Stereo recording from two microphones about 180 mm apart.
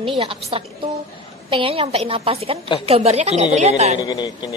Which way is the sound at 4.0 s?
20° left (ahead or behind).